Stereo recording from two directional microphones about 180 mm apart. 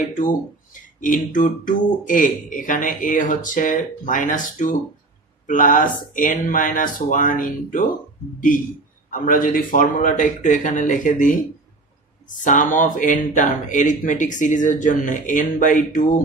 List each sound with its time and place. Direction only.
1.0 s speech: 45° left (ahead or behind)
9.1 s speech: 50° left (ahead or behind)
12.4 s speech: 45° left (ahead or behind)